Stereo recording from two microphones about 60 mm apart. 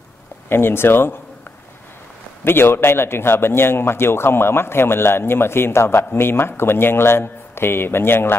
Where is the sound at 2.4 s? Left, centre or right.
Left.